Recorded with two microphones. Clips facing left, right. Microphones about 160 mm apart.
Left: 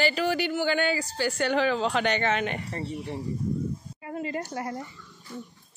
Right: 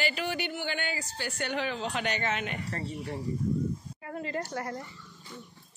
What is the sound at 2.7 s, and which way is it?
A woman's voice, 20° left (ahead or behind).